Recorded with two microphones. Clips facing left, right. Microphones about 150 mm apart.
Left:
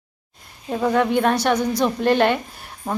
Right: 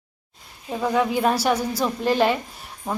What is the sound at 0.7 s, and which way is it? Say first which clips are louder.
A woman's voice: left 3 dB; 5° right (ahead or behind).